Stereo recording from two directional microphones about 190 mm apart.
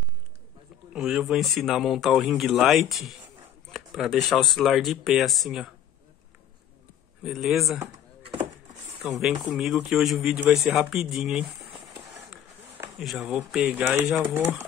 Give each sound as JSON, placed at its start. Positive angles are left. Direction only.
{"t": 0.9, "sound": "speech", "side_deg": 0}
{"t": 7.2, "sound": "speech", "side_deg": 0}
{"t": 9.2, "sound": "speech", "side_deg": 0}
{"t": 13.0, "sound": "speech", "side_deg": 0}